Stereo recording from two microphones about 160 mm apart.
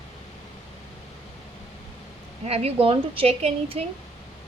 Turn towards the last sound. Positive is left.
turn(degrees=-40)  # may be behind; listen again after turning